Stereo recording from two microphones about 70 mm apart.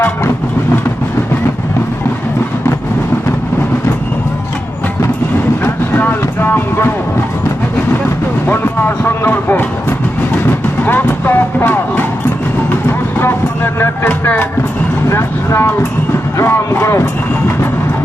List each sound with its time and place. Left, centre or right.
5.9 s vehicle: left
8.5 s a sound: left
10.8 s vehicle: left
13.1 s music: left
15.1 s speech: left